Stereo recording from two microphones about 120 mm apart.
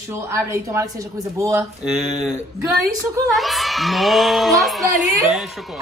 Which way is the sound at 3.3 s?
Centre (ahead or behind).